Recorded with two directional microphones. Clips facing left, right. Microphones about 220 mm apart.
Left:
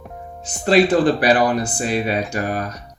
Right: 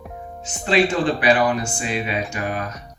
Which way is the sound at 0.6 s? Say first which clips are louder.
Left 4 dB; 40° left (ahead or behind).